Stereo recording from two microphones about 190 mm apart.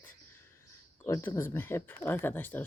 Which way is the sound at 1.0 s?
15° left (ahead or behind).